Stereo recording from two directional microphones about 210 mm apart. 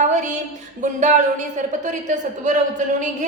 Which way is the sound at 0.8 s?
35° right (ahead or behind).